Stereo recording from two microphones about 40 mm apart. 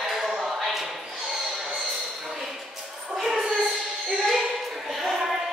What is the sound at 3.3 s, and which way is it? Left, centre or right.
Music, centre.